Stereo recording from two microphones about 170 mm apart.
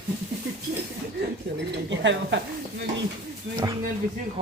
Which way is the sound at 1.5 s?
90° right.